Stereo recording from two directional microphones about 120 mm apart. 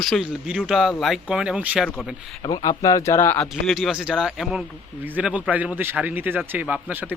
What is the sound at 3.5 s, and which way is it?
A man's voice, centre (ahead or behind).